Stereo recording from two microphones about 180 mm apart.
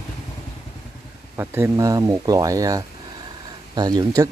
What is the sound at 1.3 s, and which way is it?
Speech, 15° right (ahead or behind).